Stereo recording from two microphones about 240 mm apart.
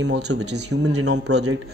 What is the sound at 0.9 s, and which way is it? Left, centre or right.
Speech, right.